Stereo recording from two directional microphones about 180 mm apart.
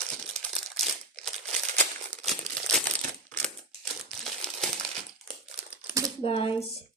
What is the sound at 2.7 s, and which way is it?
Crushing, 5° left (ahead or behind).